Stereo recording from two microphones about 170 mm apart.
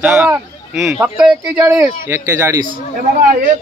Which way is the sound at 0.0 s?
10° right (ahead or behind).